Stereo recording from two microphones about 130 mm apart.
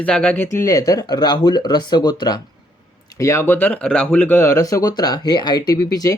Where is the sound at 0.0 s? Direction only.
5° left (ahead or behind).